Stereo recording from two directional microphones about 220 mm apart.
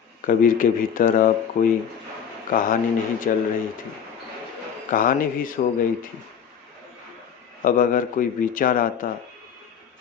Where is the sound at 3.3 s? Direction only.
35° left (ahead or behind).